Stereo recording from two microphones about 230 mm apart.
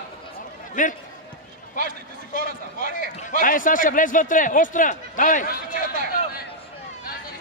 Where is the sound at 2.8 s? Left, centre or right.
Left.